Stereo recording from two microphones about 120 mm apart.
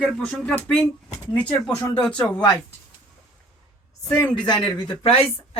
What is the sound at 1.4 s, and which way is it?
Speech, 15° left (ahead or behind).